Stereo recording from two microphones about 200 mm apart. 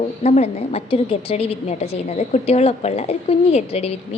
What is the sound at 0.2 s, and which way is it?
A woman's voice, 35° left (ahead or behind).